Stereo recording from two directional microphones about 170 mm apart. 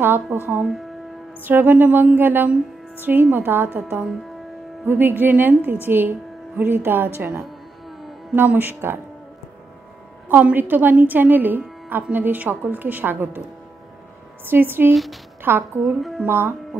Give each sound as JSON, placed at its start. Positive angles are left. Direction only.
{"t": 0.0, "sound": "a woman's voice", "side_deg": -10}
{"t": 10.2, "sound": "a woman's voice", "side_deg": -10}
{"t": 14.4, "sound": "a woman's voice", "side_deg": -10}
{"t": 15.8, "sound": "a woman's voice", "side_deg": 0}
{"t": 16.3, "sound": "a woman's voice", "side_deg": -10}